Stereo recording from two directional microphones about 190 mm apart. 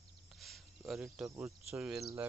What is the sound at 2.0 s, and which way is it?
Speech, 15° right (ahead or behind).